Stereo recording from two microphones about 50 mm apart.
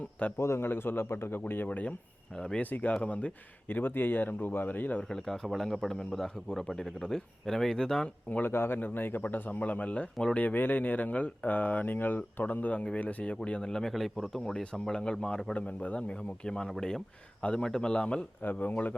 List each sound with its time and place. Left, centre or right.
0.3 s a man's voice: left
0.7 s speech: left
1.6 s speech: left
5.0 s speech: centre
8.3 s speech: left
8.5 s speech: left
10.3 s speech: left
13.3 s speech: centre
15.5 s a man's voice: left
18.4 s speech: left